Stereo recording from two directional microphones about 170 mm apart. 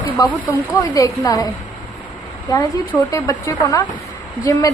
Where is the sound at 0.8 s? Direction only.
20° left (ahead or behind).